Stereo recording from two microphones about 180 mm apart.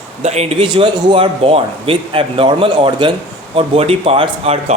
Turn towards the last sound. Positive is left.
turn(degrees=-35)  # may be behind; listen again after turning